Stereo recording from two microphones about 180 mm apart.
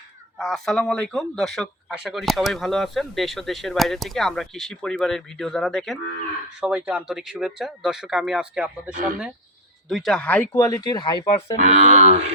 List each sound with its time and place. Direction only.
0.3 s speech: 5° left (ahead or behind)
9.9 s speech: centre (ahead or behind)
10.6 s speech: 20° left (ahead or behind)
11.6 s speech: 40° right (ahead or behind)